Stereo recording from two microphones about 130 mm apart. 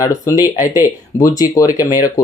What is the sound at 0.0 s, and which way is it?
Speech, 25° left (ahead or behind).